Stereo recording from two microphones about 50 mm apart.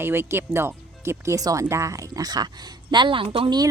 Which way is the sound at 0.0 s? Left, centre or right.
Right.